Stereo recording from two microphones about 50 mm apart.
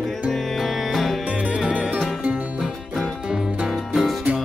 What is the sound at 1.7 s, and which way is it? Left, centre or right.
Music, right.